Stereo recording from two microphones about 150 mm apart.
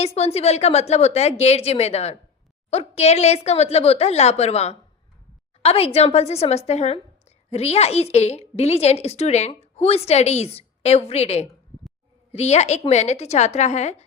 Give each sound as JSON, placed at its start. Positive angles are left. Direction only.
{"t": 0.0, "sound": "a woman's voice", "side_deg": 45}